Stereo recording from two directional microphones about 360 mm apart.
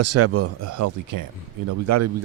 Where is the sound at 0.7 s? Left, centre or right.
Right.